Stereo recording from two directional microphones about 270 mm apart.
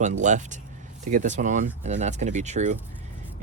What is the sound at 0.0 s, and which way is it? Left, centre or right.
Speech, right.